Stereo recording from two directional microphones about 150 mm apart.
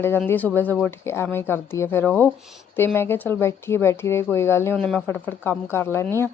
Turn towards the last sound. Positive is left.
turn(degrees=15)  # may be behind; listen again after turning